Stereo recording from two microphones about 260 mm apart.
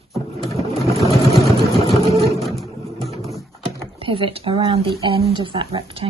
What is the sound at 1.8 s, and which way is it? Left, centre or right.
Vehicle, right.